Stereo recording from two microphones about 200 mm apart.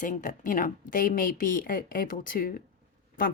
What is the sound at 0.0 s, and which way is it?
A woman's voice, 40° left (ahead or behind).